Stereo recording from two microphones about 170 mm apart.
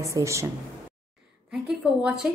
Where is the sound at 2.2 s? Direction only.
10° right (ahead or behind).